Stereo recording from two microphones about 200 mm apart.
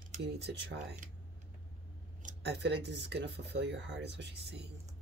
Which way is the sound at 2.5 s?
60° right (ahead or behind).